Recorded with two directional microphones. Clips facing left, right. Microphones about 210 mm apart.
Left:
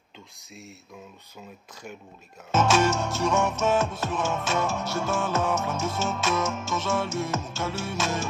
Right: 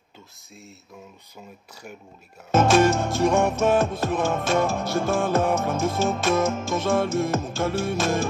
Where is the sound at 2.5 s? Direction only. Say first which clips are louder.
Right 4 dB; 55° right (ahead or behind).